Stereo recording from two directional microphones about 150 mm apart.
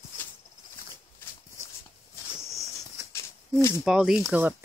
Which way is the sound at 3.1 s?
20° left (ahead or behind).